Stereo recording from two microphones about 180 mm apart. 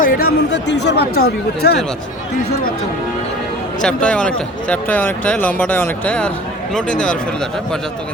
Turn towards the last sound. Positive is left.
turn(degrees=5)  # may be behind; listen again after turning